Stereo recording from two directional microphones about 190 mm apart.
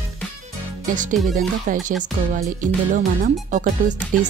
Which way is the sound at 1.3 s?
45° right (ahead or behind).